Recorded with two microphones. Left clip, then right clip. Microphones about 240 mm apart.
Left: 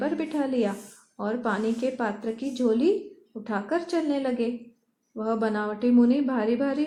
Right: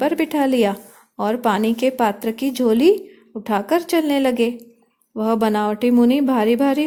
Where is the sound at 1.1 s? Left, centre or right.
Right.